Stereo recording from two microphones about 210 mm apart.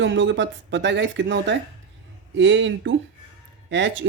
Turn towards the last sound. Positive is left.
turn(degrees=-60)  # may be behind; listen again after turning